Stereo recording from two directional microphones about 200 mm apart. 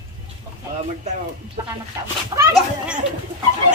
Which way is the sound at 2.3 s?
25° right (ahead or behind).